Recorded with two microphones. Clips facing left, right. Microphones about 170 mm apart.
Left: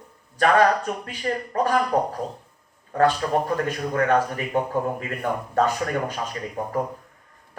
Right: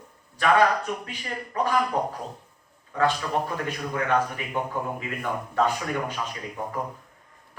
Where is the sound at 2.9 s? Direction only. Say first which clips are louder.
Left 4 dB; 45° left (ahead or behind).